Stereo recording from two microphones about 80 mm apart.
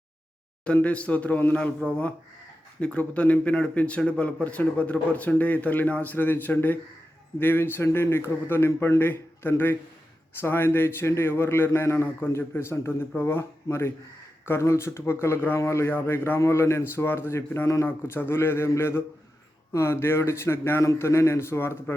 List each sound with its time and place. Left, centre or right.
0.6 s speech: centre
2.8 s a man's voice: centre; by 21.9 s left